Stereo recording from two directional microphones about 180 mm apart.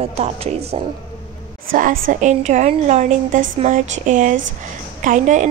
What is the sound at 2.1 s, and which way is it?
A woman's voice, 40° right (ahead or behind).